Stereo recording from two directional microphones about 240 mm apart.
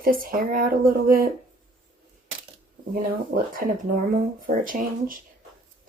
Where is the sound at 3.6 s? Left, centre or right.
Right.